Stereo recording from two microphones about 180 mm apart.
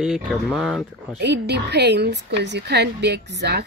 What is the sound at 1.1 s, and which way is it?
Speech, 70° right (ahead or behind).